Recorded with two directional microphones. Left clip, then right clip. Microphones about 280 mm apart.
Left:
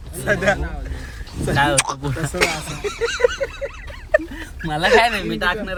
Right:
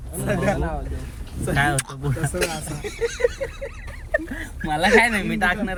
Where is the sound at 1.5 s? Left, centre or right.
Centre.